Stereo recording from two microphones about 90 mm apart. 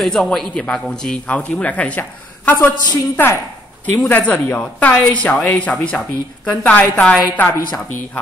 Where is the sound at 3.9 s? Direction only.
25° left (ahead or behind).